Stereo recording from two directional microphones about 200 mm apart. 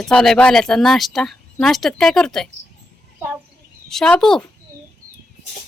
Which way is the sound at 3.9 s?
5° left (ahead or behind).